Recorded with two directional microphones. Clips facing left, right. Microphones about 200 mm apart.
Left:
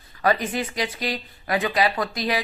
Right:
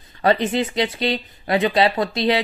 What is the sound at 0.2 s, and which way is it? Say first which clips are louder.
Speech: right 4 dB; 25° right (ahead or behind).